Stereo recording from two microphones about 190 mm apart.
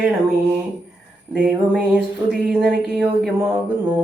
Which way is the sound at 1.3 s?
5° right (ahead or behind).